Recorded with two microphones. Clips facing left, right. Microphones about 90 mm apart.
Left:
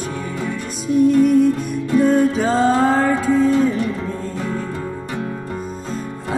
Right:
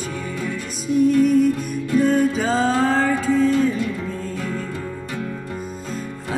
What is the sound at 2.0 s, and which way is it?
Music, centre (ahead or behind).